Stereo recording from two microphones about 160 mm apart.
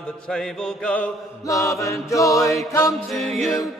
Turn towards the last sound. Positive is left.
turn(degrees=0)  # may be behind; listen again after turning